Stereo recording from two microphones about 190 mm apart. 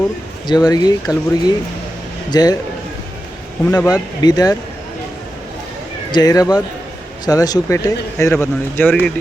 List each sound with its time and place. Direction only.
0.4 s speech: 20° left (ahead or behind)
3.7 s speech: 15° left (ahead or behind)
6.1 s speech: 20° left (ahead or behind)